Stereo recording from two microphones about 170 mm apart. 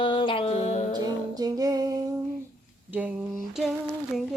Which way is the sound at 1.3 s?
20° right (ahead or behind).